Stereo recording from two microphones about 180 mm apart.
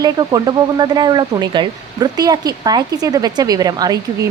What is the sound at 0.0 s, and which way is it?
Speech, 20° right (ahead or behind).